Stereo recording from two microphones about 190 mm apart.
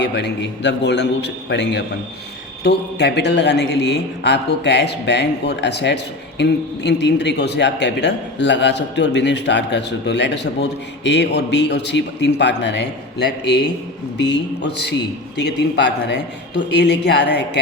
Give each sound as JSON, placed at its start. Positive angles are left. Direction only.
{"t": 0.0, "sound": "a man's voice", "side_deg": 65}